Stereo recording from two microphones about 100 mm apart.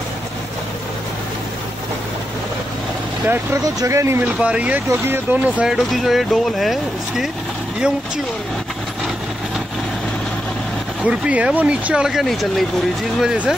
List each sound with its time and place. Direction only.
3.6 s speech: 30° right (ahead or behind)
4.3 s speech: 10° right (ahead or behind)
5.7 s speech: centre (ahead or behind)
11.0 s speech: 10° right (ahead or behind)